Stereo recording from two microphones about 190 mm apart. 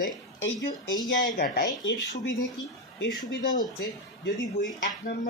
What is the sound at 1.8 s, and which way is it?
Speech, 90° left.